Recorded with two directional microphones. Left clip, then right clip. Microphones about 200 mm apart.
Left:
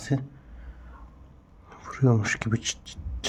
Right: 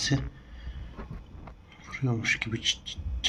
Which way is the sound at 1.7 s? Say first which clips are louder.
Left 8 dB; 65° left (ahead or behind).